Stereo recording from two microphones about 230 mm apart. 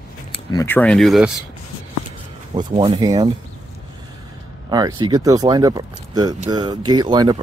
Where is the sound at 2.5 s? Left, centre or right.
Right.